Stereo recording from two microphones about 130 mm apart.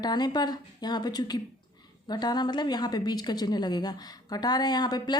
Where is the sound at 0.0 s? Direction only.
35° left (ahead or behind).